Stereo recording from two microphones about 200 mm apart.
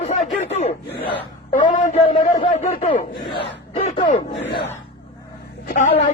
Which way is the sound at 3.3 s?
60° left (ahead or behind).